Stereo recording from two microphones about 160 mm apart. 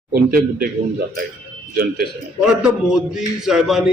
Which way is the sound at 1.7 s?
70° right (ahead or behind).